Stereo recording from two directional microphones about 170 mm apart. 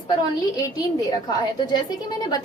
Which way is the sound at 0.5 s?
20° left (ahead or behind).